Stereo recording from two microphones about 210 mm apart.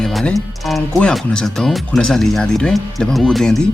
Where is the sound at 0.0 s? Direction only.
Centre (ahead or behind).